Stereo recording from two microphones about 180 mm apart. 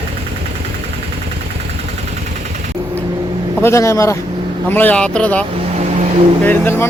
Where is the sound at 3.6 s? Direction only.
15° left (ahead or behind).